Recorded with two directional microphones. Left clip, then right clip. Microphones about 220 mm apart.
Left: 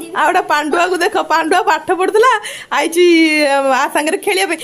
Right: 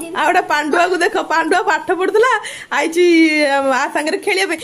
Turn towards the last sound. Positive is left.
turn(degrees=10)  # may be behind; listen again after turning